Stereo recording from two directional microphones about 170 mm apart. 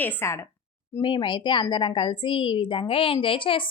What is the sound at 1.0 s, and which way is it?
A woman's voice, 30° left (ahead or behind).